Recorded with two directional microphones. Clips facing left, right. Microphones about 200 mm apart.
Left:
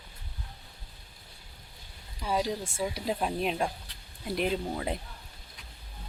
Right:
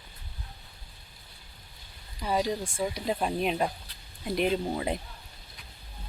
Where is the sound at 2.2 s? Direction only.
Centre (ahead or behind).